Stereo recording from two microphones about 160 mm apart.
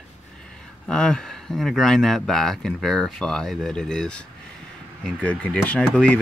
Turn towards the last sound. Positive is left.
turn(degrees=5)  # may be behind; listen again after turning